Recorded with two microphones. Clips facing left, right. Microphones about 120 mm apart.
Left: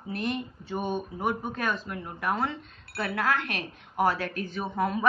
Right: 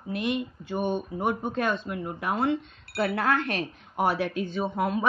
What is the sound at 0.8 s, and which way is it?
Speech, 20° right (ahead or behind).